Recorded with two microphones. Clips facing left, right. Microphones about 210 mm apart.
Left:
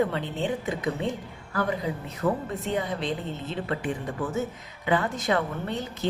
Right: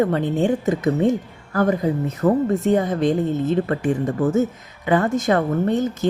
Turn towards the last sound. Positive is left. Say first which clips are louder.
# right 11 dB
turn(degrees=-45)  # may be behind; listen again after turning